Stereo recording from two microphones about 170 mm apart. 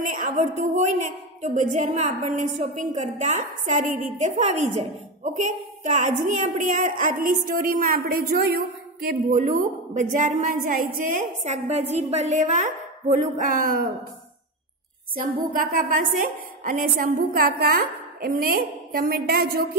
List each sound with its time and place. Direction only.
0.0 s a woman's voice: 50° right (ahead or behind)
15.5 s a woman's voice: 55° right (ahead or behind)